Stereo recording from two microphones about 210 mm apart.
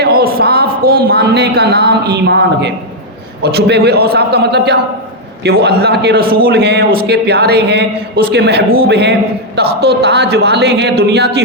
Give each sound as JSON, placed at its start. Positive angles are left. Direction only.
{"t": 0.0, "sound": "a man's voice", "side_deg": -45}